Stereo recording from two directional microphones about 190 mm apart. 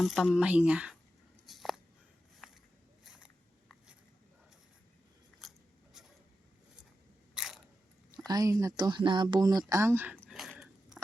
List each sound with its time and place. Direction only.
0.0 s speech: centre (ahead or behind)
1.5 s a sound: centre (ahead or behind)
3.0 s biting: centre (ahead or behind)
5.4 s scissors: centre (ahead or behind)
7.3 s biting: centre (ahead or behind)
8.3 s speech: 20° right (ahead or behind); by 11.0 s centre (ahead or behind)